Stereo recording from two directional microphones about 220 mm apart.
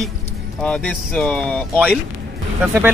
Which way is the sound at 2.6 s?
5° right (ahead or behind).